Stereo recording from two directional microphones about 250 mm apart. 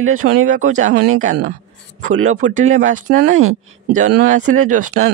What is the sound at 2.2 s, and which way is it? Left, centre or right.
Speech, right.